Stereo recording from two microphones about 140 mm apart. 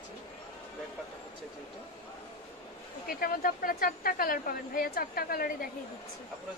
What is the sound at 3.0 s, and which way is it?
Speech, 90° left.